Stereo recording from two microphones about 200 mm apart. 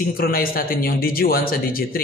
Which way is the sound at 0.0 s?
45° left (ahead or behind).